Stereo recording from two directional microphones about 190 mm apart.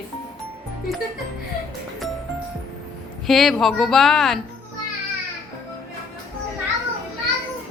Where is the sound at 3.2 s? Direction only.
Centre (ahead or behind).